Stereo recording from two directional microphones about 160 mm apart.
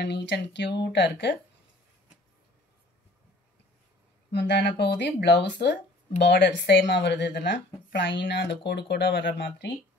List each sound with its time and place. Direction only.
0.0 s speech: 90° left
4.3 s speech: 90° left